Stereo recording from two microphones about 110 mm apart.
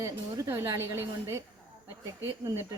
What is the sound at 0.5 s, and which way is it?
Speech, 25° right (ahead or behind).